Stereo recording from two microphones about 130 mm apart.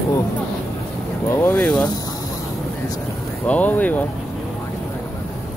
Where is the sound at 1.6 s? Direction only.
5° left (ahead or behind).